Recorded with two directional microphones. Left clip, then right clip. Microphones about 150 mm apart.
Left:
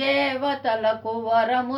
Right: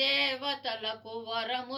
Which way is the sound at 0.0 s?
45° left (ahead or behind).